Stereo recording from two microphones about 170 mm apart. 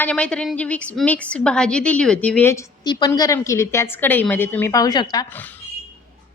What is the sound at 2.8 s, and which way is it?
A woman's voice, 25° left (ahead or behind).